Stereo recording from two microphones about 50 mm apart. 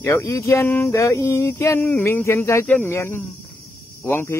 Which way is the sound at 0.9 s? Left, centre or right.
Left.